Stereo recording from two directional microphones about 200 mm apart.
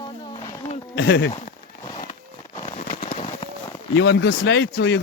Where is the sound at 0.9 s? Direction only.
65° left (ahead or behind).